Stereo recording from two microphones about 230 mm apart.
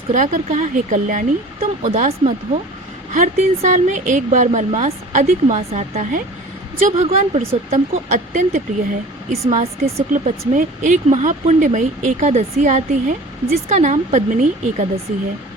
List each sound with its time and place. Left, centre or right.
0.1 s speech: right